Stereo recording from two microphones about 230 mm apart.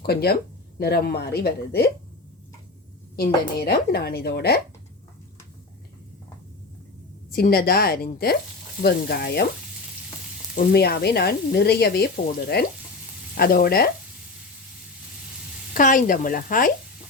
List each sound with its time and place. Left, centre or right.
0.0 s speech: left
3.2 s speech: left
7.3 s a woman's voice: left
10.7 s a woman's voice: left
15.7 s a woman's voice: left